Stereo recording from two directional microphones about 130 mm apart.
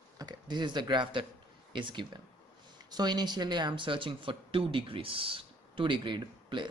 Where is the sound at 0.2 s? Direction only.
35° right (ahead or behind).